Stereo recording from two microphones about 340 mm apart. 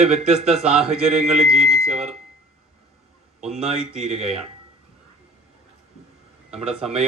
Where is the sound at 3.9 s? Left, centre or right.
Centre.